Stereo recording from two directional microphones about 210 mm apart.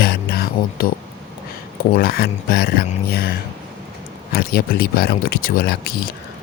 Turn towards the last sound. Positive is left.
turn(degrees=45)  # may be behind; listen again after turning